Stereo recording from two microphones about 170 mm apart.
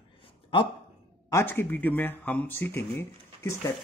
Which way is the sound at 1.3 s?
10° left (ahead or behind).